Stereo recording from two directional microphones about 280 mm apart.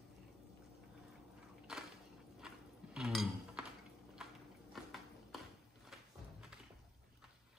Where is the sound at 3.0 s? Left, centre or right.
Centre.